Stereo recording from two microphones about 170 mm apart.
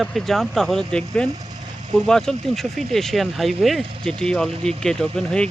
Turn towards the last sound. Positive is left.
turn(degrees=5)  # may be behind; listen again after turning